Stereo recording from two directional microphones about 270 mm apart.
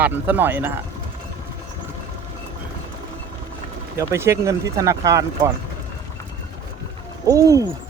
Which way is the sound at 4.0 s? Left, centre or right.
Centre.